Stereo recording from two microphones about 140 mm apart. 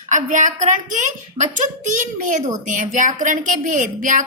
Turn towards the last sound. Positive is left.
turn(degrees=-65)  # may be behind; listen again after turning